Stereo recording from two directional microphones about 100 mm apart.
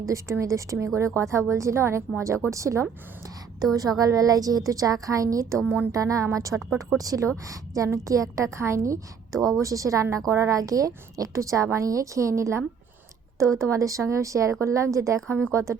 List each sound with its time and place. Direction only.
0.1 s a woman's voice: 30° right (ahead or behind)